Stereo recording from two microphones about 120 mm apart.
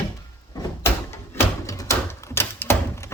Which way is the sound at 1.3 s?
25° left (ahead or behind).